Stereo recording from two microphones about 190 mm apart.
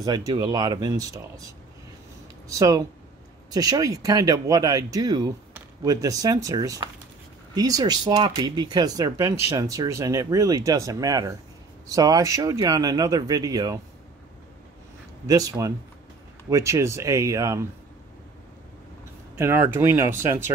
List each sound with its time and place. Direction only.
0.3 s speech: 20° right (ahead or behind)
2.4 s speech: 20° right (ahead or behind)
15.2 s speech: 20° right (ahead or behind)
19.3 s speech: 10° right (ahead or behind)